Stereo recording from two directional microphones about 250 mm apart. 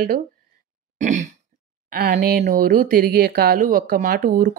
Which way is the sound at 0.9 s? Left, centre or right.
Right.